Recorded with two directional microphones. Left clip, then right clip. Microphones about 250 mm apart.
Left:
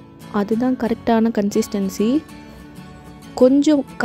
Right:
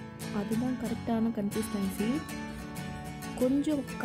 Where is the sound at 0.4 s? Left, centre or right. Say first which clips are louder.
Left 14 dB; left.